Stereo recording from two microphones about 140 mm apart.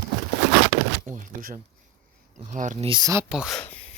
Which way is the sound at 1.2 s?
75° right (ahead or behind).